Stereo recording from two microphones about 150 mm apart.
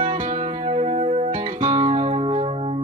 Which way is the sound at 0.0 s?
35° right (ahead or behind).